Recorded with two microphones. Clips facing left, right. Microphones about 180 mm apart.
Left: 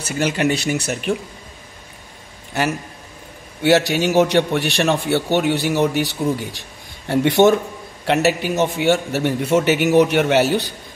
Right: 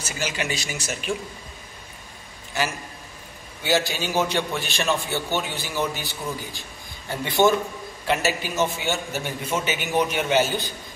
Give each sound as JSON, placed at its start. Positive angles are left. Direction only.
{"t": 0.0, "sound": "speech", "side_deg": 60}
{"t": 3.6, "sound": "a man's voice", "side_deg": 70}